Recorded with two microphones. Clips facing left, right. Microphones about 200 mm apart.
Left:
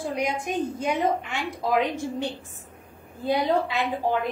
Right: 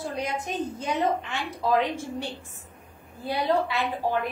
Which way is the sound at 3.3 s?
15° left (ahead or behind).